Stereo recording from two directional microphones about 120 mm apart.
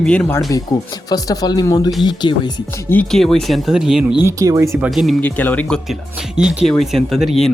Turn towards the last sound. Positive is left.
turn(degrees=0)  # may be behind; listen again after turning